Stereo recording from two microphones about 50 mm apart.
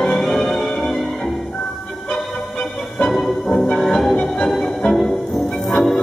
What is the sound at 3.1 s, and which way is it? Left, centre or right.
Music, centre.